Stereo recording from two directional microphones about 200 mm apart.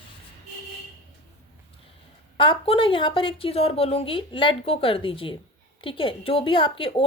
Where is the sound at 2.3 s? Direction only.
25° left (ahead or behind).